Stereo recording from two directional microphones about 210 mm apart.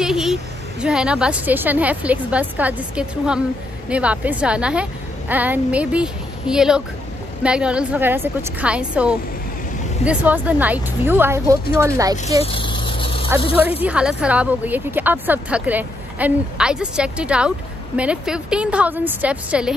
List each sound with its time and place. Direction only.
0.0 s a woman's voice: centre (ahead or behind)
12.4 s vehicle: 25° left (ahead or behind)
13.6 s a woman's voice: 10° right (ahead or behind)